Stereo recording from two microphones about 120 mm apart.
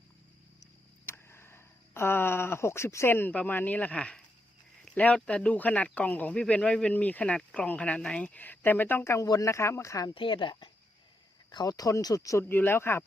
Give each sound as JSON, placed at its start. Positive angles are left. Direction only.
{"t": 1.0, "sound": "speech", "side_deg": 20}
{"t": 10.2, "sound": "speech", "side_deg": 45}
{"t": 11.5, "sound": "speech", "side_deg": 30}